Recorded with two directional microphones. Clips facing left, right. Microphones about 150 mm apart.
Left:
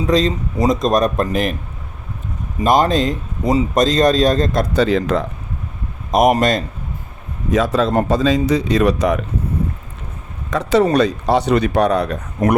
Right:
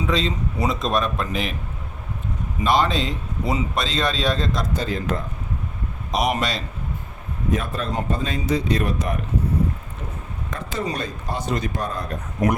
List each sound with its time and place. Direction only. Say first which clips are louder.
0.1 s speech: left 10 dB; 40° left (ahead or behind)
2.6 s a man's voice: left 6 dB; 45° left (ahead or behind)
4.7 s speech: left 9 dB; 75° left (ahead or behind)
6.1 s a man's voice: left 9 dB; 50° left (ahead or behind)
7.5 s speech: left 10 dB; 90° left
10.5 s speech: left 14 dB; 80° left